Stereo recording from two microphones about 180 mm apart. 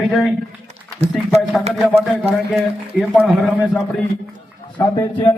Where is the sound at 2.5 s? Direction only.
5° right (ahead or behind).